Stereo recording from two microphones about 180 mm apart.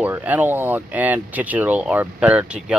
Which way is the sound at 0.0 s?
10° right (ahead or behind).